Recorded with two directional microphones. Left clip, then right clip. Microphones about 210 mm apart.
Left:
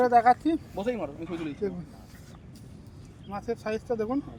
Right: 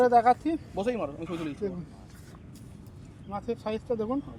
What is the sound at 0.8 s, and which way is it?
Speech, 45° right (ahead or behind).